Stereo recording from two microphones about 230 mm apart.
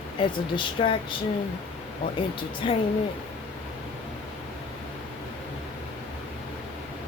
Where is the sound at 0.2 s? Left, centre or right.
Left.